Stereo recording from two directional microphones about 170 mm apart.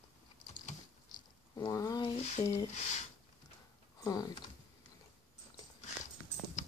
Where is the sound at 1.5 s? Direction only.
20° left (ahead or behind).